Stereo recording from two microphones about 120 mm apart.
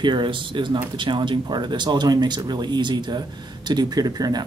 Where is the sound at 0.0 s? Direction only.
40° right (ahead or behind).